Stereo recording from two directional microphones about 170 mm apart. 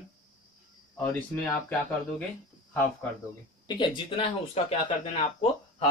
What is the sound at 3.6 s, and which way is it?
Speech, 25° left (ahead or behind).